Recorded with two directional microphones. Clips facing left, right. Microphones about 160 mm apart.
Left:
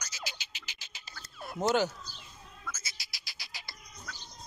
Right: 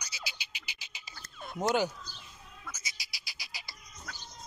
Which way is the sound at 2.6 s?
15° right (ahead or behind).